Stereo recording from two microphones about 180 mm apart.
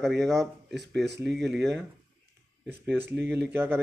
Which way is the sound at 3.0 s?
65° right (ahead or behind).